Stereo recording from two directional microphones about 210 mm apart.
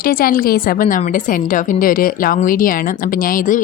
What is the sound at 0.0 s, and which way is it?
A woman's voice, 45° left (ahead or behind).